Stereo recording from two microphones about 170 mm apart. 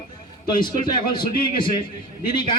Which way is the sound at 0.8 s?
25° left (ahead or behind).